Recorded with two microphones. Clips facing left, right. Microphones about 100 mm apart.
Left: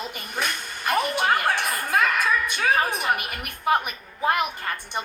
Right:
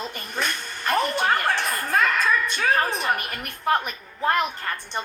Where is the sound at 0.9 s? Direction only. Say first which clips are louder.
Even; 10° left (ahead or behind).